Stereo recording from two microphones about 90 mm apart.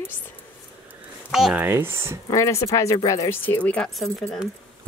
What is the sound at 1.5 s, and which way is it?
Speech, 20° right (ahead or behind).